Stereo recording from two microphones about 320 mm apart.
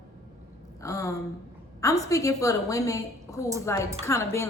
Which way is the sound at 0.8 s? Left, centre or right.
Centre.